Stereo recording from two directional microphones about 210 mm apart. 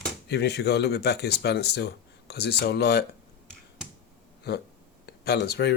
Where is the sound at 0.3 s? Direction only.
50° left (ahead or behind).